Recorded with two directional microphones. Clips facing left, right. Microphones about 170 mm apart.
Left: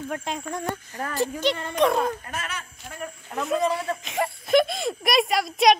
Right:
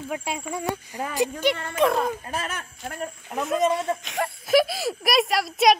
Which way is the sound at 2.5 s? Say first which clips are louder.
Right 3 dB; 50° right (ahead or behind).